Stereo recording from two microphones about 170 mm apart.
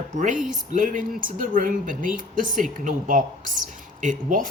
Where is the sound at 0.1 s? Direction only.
45° right (ahead or behind).